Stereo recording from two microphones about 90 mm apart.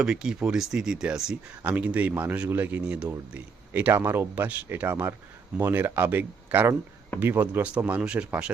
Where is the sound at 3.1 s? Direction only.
20° right (ahead or behind).